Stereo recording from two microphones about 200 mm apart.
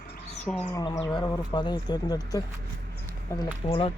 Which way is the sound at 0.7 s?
20° left (ahead or behind).